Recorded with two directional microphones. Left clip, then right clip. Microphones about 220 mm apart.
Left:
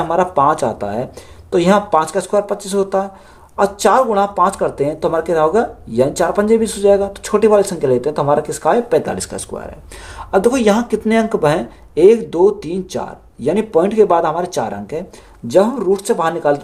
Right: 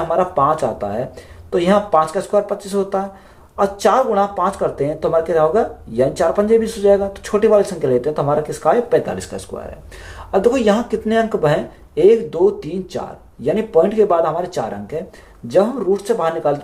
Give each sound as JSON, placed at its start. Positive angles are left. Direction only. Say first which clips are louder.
{"t": 0.1, "sound": "speech", "louder": "left 2 dB", "side_deg": 45}